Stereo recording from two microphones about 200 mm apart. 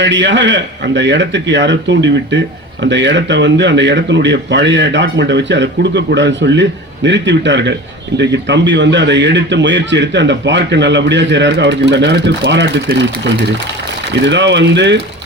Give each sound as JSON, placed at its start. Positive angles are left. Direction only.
{"t": 0.0, "sound": "a man's voice", "side_deg": -60}